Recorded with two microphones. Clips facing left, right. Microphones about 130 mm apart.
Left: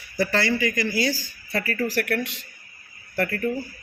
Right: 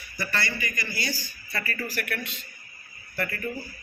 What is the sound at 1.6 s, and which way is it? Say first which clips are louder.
A man's voice: left 8 dB; 75° left (ahead or behind).